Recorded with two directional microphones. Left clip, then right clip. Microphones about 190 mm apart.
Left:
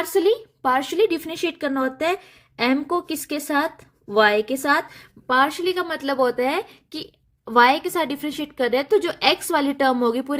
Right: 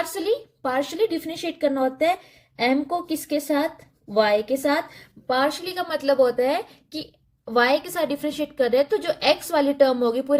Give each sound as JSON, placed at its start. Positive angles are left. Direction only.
{"t": 0.0, "sound": "a woman's voice", "side_deg": 45}